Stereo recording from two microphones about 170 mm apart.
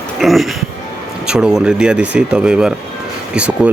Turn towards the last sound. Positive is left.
turn(degrees=-5)  # may be behind; listen again after turning